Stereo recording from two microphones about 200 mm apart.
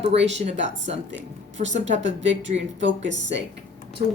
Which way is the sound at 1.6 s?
40° right (ahead or behind).